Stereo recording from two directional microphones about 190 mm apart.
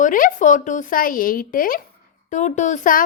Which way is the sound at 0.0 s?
45° left (ahead or behind).